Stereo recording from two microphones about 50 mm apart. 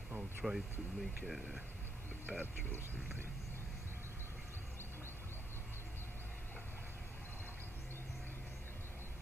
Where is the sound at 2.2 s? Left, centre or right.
Right.